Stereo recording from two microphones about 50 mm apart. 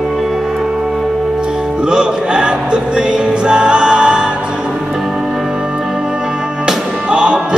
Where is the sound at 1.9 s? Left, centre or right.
Centre.